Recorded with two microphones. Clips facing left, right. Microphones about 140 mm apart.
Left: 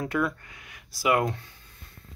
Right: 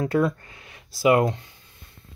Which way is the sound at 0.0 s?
30° right (ahead or behind).